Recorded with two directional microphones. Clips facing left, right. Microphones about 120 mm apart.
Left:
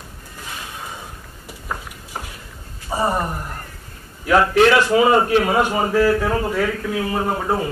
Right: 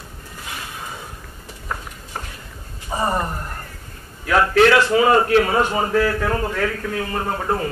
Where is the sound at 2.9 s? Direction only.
10° left (ahead or behind).